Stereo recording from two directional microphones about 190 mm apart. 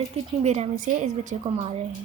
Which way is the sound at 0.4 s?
40° right (ahead or behind).